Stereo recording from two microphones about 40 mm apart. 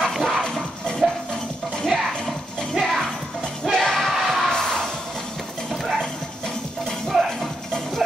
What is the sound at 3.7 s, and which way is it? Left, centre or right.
Music, centre.